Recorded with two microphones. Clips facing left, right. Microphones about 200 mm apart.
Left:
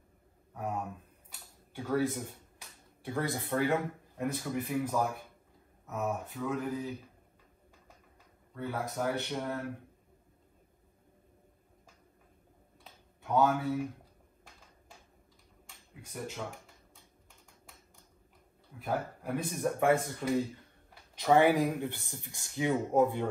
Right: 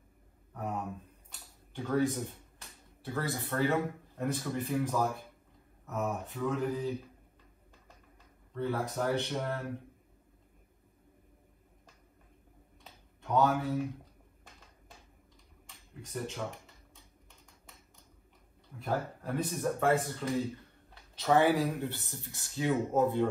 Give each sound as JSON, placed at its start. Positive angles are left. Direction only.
{"t": 0.6, "sound": "a sound", "side_deg": 0}
{"t": 1.7, "sound": "speech", "side_deg": 5}
{"t": 3.0, "sound": "speech", "side_deg": 15}
{"t": 8.5, "sound": "speech", "side_deg": 10}
{"t": 12.8, "sound": "a sound", "side_deg": 0}
{"t": 16.1, "sound": "computer keyboard", "side_deg": 0}
{"t": 18.8, "sound": "speech", "side_deg": 10}